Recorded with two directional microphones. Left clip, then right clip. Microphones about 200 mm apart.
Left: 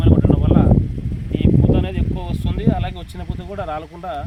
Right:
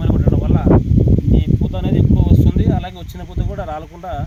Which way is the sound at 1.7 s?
10° right (ahead or behind).